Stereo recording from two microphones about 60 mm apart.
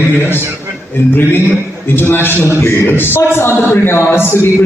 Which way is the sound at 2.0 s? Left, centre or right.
Left.